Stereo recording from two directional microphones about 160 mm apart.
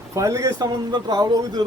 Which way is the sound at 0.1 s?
20° right (ahead or behind).